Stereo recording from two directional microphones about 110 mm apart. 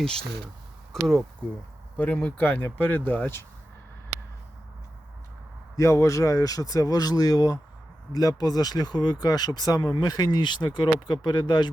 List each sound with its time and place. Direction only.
0.0 s speech: 5° left (ahead or behind)
2.1 s speech: 15° left (ahead or behind)
5.7 s speech: 25° left (ahead or behind); by 11.7 s 40° left (ahead or behind)